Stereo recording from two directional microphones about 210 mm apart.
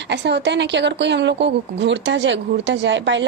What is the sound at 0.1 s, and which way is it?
A woman's voice, 55° right (ahead or behind).